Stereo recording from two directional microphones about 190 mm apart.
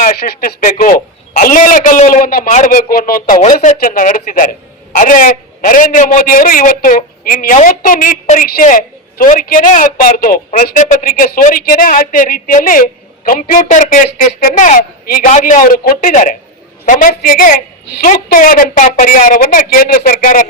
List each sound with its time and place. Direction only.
0.0 s a man's voice: 50° left (ahead or behind)